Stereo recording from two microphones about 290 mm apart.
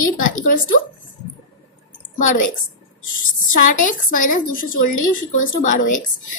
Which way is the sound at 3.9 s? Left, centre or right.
Left.